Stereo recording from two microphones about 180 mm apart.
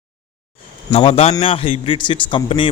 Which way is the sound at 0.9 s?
35° left (ahead or behind).